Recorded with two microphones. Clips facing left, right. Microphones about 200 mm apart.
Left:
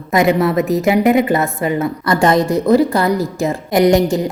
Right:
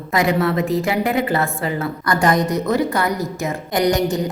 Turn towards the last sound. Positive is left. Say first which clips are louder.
# left 6 dB
turn(degrees=25)  # may be behind; listen again after turning